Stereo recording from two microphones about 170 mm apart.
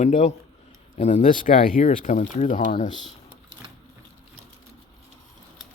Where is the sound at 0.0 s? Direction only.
45° left (ahead or behind).